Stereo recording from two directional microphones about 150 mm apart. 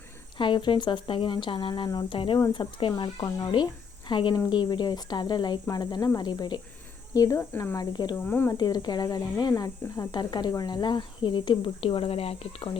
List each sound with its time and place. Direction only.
0.3 s speech: 30° left (ahead or behind); by 7.8 s 15° left (ahead or behind)
7.8 s speech: 30° left (ahead or behind)
8.1 s speech: 15° left (ahead or behind)
8.5 s speech: 30° left (ahead or behind)